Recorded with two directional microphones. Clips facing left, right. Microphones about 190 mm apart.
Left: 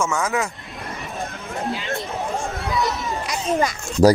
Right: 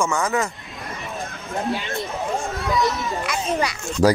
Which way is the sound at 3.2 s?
40° left (ahead or behind).